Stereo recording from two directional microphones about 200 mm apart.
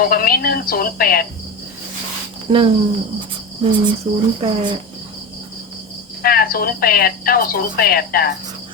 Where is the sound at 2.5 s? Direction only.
20° right (ahead or behind).